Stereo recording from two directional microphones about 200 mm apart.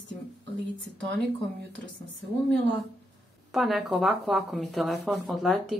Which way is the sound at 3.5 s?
Centre (ahead or behind).